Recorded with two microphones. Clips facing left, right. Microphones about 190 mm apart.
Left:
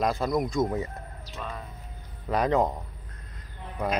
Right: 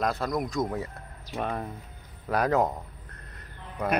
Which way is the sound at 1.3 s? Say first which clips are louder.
Right 7 dB; 60° right (ahead or behind).